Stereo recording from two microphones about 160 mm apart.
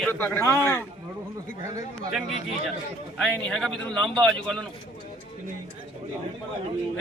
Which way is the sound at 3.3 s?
5° left (ahead or behind).